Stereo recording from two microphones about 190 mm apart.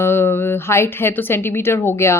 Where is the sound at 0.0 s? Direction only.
10° left (ahead or behind).